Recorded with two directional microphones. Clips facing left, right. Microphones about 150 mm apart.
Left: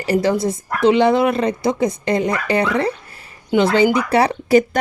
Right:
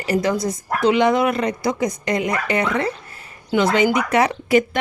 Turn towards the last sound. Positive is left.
turn(degrees=35)  # may be behind; listen again after turning